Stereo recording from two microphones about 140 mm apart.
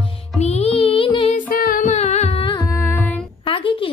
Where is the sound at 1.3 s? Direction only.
75° left (ahead or behind); by 2.4 s 50° left (ahead or behind).